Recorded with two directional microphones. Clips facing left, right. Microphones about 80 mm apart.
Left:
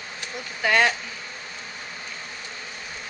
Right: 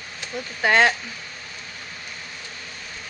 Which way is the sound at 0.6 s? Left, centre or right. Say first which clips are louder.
Right 3 dB; right.